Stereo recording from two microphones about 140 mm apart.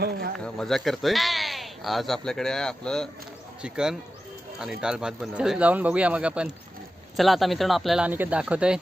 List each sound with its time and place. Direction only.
0.1 s speech: 90° right
0.3 s speech: 5° left (ahead or behind)